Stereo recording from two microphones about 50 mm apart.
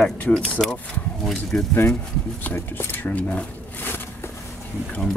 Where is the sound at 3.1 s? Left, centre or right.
Left.